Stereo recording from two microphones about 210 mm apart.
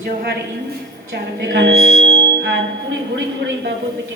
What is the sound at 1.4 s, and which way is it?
A woman's voice, 55° right (ahead or behind).